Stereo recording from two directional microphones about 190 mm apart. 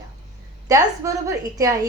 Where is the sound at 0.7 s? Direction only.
20° right (ahead or behind).